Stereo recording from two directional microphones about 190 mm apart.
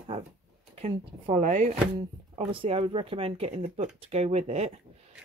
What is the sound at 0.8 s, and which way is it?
Speech, 35° right (ahead or behind).